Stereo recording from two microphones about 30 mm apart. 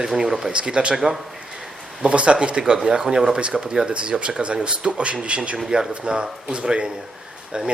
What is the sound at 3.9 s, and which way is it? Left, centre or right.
Speech, right.